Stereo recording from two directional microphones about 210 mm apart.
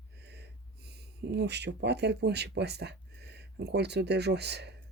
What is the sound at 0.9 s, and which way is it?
Speech, 50° right (ahead or behind).